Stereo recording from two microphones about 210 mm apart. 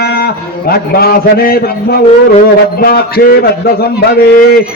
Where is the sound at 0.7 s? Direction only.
45° left (ahead or behind).